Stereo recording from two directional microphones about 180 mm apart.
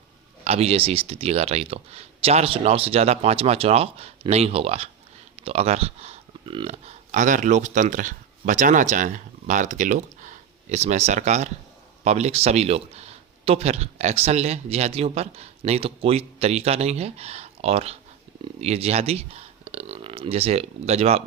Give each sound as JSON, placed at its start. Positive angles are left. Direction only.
{"t": 0.4, "sound": "speech", "side_deg": -35}